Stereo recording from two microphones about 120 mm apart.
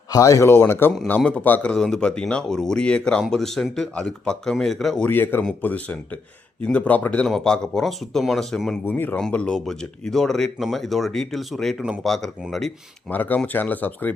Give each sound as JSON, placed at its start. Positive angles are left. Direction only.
{"t": 0.1, "sound": "speech", "side_deg": 25}
{"t": 5.0, "sound": "speech", "side_deg": 15}
{"t": 8.9, "sound": "speech", "side_deg": 15}
{"t": 13.1, "sound": "speech", "side_deg": 15}